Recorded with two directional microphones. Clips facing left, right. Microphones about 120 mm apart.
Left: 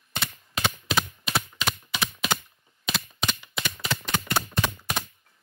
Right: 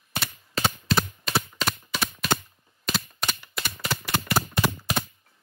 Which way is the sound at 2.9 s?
Centre (ahead or behind).